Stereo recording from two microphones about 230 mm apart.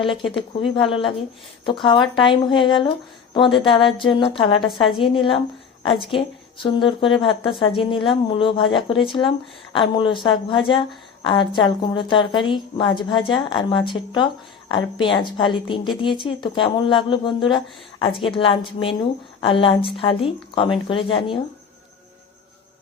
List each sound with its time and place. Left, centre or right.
0.0 s a woman's voice: left